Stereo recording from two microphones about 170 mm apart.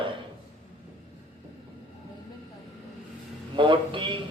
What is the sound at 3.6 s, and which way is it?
Speech, 30° right (ahead or behind).